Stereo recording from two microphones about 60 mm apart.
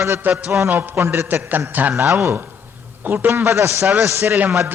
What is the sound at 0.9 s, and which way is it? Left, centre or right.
Speech, right.